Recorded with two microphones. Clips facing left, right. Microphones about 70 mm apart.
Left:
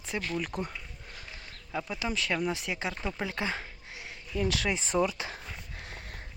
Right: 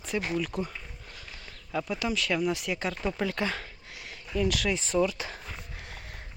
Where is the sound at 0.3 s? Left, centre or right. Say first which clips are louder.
Right 3 dB; left.